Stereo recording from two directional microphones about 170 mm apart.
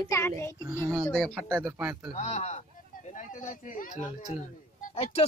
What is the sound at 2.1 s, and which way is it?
Speech, 40° left (ahead or behind).